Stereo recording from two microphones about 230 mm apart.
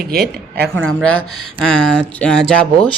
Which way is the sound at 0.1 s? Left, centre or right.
Right.